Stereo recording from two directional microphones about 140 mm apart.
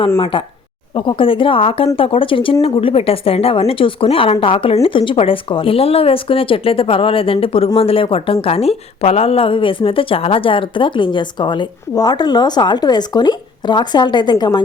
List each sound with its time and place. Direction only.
0.2 s a woman's voice: 40° left (ahead or behind)